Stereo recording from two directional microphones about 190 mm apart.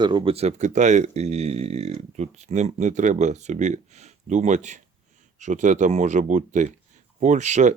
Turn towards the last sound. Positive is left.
turn(degrees=-40)  # may be behind; listen again after turning